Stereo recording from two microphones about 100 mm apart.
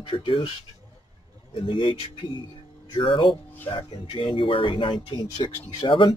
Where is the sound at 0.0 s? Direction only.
60° left (ahead or behind).